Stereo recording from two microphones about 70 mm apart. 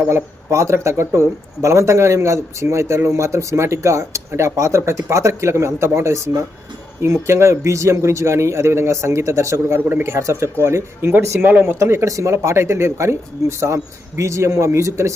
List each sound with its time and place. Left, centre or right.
0.1 s a man's voice: right
11.3 s speech: right
11.8 s a man's voice: right